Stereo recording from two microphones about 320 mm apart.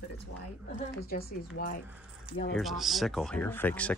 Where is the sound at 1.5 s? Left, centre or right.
Left.